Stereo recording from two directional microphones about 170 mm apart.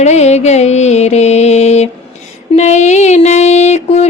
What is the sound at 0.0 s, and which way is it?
Music, 40° left (ahead or behind).